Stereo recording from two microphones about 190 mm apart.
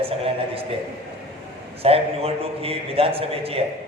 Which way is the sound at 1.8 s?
30° right (ahead or behind).